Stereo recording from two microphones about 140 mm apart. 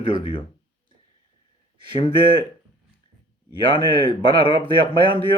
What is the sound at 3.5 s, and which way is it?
Speech, 40° left (ahead or behind).